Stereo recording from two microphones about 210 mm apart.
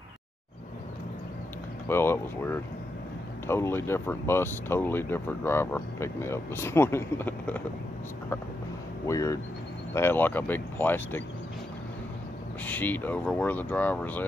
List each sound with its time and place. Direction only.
1.9 s speech: 10° left (ahead or behind)
9.0 s speech: 15° left (ahead or behind)
12.6 s speech: 10° left (ahead or behind)